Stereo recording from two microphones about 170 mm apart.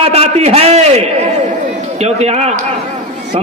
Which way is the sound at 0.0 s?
35° right (ahead or behind).